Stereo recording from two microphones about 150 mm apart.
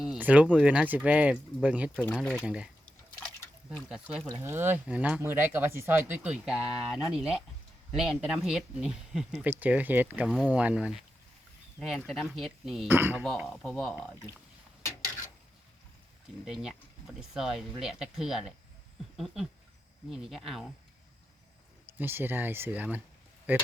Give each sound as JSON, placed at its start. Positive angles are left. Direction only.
{"t": 0.0, "sound": "speech", "side_deg": -5}
{"t": 2.1, "sound": "speech", "side_deg": 5}
{"t": 2.4, "sound": "speech", "side_deg": -5}
{"t": 2.8, "sound": "liquid", "side_deg": 10}
{"t": 4.4, "sound": "speech", "side_deg": -15}
{"t": 10.2, "sound": "speech", "side_deg": 5}
{"t": 10.5, "sound": "speech", "side_deg": -10}
{"t": 12.9, "sound": "speech", "side_deg": -15}
{"t": 13.2, "sound": "speech", "side_deg": 0}
{"t": 16.5, "sound": "speech", "side_deg": -5}
{"t": 19.1, "sound": "a sound", "side_deg": 0}
{"t": 20.1, "sound": "speech", "side_deg": -5}
{"t": 21.8, "sound": "speech", "side_deg": -15}